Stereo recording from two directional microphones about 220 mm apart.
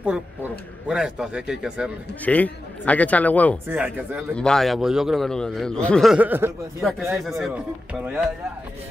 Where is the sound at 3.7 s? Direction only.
10° right (ahead or behind).